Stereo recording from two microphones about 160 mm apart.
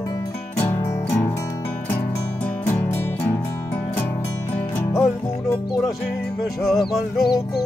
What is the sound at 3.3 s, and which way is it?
Music, 10° left (ahead or behind).